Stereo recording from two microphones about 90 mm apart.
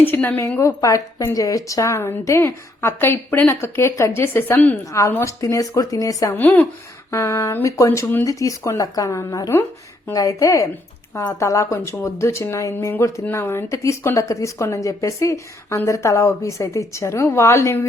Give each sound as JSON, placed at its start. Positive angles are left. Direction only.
{"t": 0.0, "sound": "a woman's voice", "side_deg": 25}
{"t": 0.8, "sound": "a woman's voice", "side_deg": 40}
{"t": 4.9, "sound": "a woman's voice", "side_deg": 35}
{"t": 6.3, "sound": "a woman's voice", "side_deg": 20}
{"t": 7.1, "sound": "a woman's voice", "side_deg": 35}